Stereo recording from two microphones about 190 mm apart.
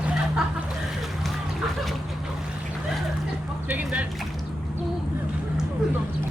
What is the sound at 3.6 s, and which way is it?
Music, 5° right (ahead or behind).